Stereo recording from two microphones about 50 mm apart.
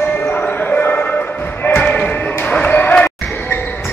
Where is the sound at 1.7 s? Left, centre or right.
Centre.